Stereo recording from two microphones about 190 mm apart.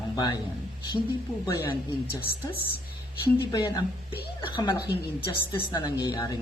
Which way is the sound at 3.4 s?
20° left (ahead or behind).